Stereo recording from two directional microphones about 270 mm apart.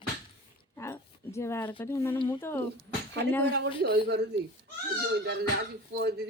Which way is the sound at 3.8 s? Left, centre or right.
Right.